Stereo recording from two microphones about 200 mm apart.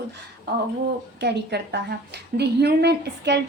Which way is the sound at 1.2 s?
55° right (ahead or behind).